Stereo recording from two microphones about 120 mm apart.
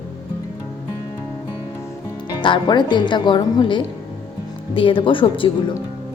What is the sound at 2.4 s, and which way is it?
Speech, 40° left (ahead or behind).